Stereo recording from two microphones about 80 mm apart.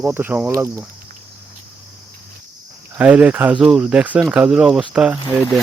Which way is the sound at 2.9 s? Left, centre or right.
Centre.